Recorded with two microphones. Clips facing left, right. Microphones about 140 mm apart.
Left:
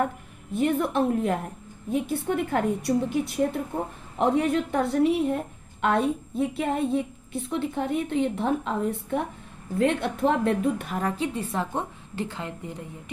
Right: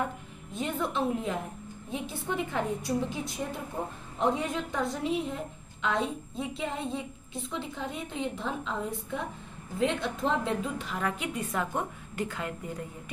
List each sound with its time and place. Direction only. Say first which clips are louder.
0.5 s a woman's voice: left 8 dB; 60° left (ahead or behind)
10.9 s a woman's voice: left 5 dB; 35° left (ahead or behind)